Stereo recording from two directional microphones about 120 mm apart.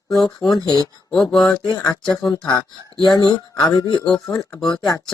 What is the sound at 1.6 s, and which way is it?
Speech, 35° left (ahead or behind).